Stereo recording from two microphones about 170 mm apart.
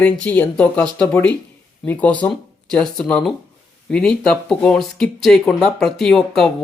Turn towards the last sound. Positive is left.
turn(degrees=0)  # may be behind; listen again after turning